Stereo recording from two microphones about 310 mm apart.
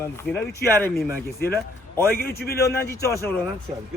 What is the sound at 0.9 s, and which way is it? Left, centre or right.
A man's voice, left.